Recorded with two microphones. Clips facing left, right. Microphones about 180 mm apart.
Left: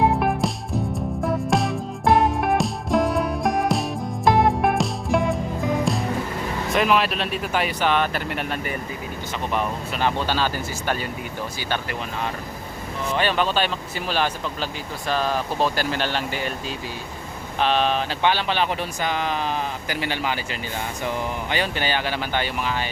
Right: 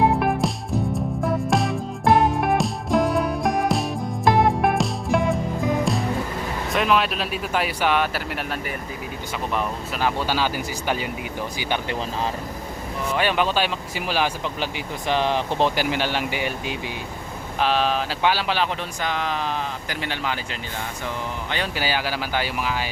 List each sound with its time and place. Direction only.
0.0 s music: centre (ahead or behind)
6.7 s speech: centre (ahead or behind); by 11.9 s 15° right (ahead or behind)
13.1 s speech: 10° right (ahead or behind)
21.8 s speech: 5° right (ahead or behind)